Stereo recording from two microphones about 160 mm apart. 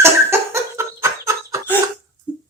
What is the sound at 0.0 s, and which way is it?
Chicken, 15° right (ahead or behind).